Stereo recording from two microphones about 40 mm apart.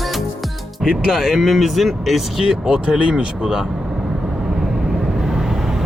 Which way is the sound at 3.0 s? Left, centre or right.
Right.